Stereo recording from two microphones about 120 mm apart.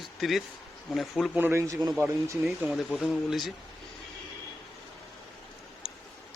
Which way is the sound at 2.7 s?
Centre (ahead or behind).